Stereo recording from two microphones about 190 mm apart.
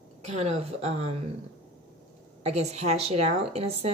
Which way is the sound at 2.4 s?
35° right (ahead or behind).